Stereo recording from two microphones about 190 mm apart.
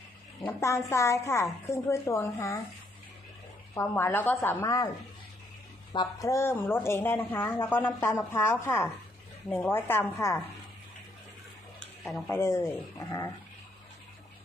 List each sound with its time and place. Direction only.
0.4 s a woman's voice: 15° left (ahead or behind)
3.8 s a woman's voice: 10° left (ahead or behind)
5.9 s a woman's voice: 20° left (ahead or behind)
12.3 s a woman's voice: 15° left (ahead or behind)